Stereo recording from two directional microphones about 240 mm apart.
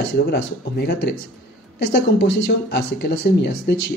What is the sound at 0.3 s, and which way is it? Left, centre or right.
Speech, left.